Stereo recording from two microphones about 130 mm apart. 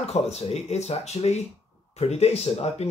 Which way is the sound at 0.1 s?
55° left (ahead or behind).